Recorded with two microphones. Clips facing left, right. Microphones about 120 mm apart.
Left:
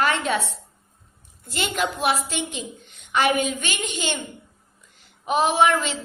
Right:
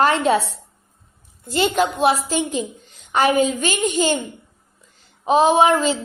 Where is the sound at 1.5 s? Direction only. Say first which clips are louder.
Right 7 dB; 30° right (ahead or behind).